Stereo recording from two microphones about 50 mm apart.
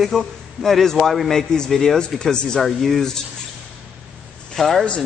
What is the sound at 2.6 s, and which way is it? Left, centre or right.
Speech, centre.